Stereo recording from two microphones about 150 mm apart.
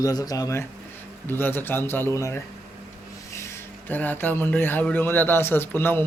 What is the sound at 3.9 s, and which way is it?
Speech, 10° left (ahead or behind).